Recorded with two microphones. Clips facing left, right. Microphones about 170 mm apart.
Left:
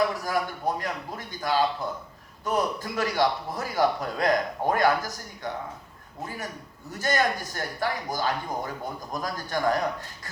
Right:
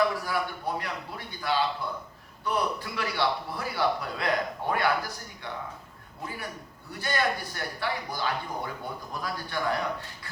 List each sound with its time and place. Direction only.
0.3 s a man's voice: 45° left (ahead or behind)
7.0 s a man's voice: 45° left (ahead or behind)